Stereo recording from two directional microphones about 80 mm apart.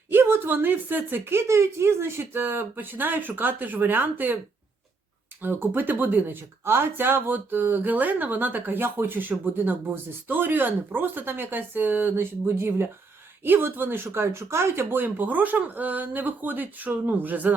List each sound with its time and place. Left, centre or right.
0.1 s speech: right
5.4 s speech: right